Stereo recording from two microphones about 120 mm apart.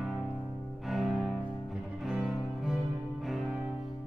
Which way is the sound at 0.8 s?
Centre (ahead or behind).